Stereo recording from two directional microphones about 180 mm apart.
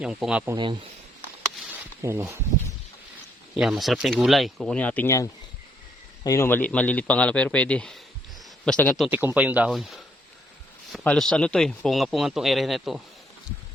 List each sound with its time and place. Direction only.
0.0 s speech: 5° right (ahead or behind)
0.5 s speech: 25° right (ahead or behind)
2.0 s speech: 15° right (ahead or behind)
3.5 s speech: centre (ahead or behind)
9.0 s speech: 10° right (ahead or behind)